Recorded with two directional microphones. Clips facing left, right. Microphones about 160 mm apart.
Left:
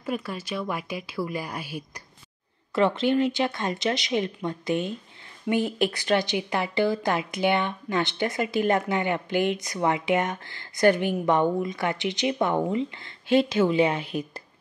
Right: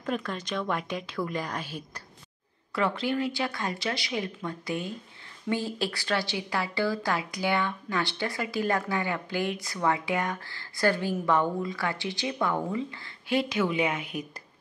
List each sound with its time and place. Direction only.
0.0 s a woman's voice: 10° left (ahead or behind)
2.7 s a woman's voice: 25° left (ahead or behind)